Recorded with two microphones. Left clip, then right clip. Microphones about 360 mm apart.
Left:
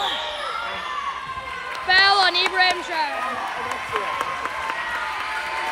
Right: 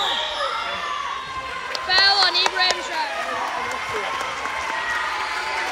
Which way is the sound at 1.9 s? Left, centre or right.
Centre.